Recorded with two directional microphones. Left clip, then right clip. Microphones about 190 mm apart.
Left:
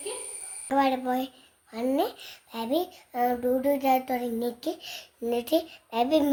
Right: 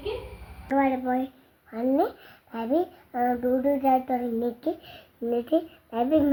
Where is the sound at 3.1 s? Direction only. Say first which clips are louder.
Even; 20° left (ahead or behind).